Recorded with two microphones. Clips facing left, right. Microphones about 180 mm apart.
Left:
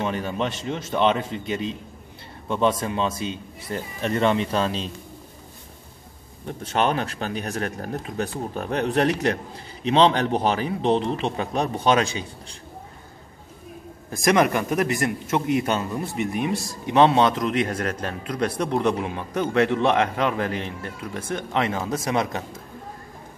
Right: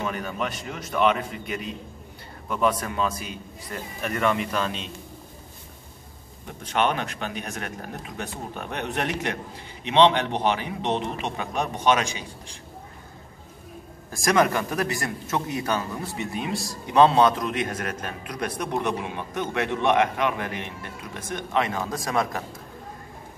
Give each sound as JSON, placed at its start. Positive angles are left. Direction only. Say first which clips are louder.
{"t": 0.0, "sound": "speech", "louder": "left 3 dB", "side_deg": 30}
{"t": 6.4, "sound": "speech", "louder": "left 2 dB", "side_deg": 35}
{"t": 14.1, "sound": "speech", "louder": "left 2 dB", "side_deg": 20}